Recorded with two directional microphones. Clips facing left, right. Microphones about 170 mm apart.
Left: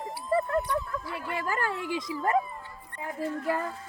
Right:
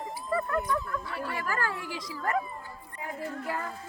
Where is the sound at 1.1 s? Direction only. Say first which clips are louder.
Left 2 dB; 20° left (ahead or behind).